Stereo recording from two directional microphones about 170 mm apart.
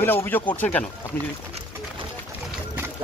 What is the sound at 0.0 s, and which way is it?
Speech, 10° left (ahead or behind).